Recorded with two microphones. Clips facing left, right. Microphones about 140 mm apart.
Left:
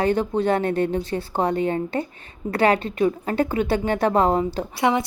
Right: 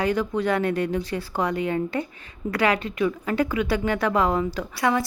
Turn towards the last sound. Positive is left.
turn(degrees=20)  # may be behind; listen again after turning